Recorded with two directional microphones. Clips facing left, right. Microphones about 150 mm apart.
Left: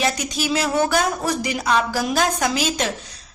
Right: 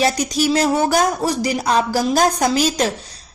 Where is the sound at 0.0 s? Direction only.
40° right (ahead or behind).